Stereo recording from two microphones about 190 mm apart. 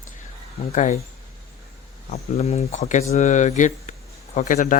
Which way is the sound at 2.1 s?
35° left (ahead or behind).